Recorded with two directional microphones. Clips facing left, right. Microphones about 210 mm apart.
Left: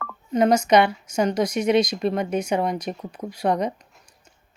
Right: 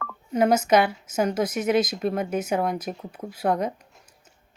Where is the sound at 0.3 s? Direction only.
5° right (ahead or behind).